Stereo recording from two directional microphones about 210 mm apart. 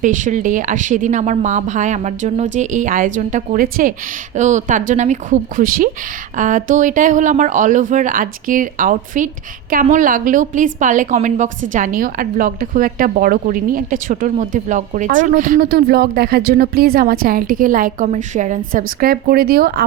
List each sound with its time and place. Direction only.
0.0 s a woman's voice: 35° right (ahead or behind)